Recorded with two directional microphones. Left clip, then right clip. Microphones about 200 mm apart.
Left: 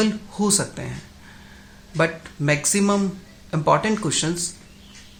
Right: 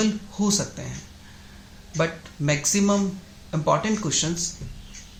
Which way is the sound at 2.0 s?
25° left (ahead or behind).